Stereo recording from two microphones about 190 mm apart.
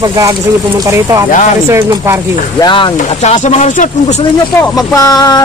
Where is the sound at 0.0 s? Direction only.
20° right (ahead or behind).